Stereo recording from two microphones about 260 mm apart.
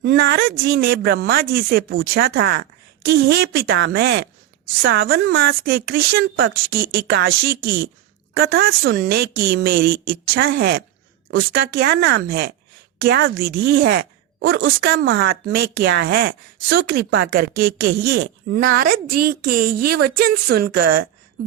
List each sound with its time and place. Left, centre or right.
0.0 s speech: right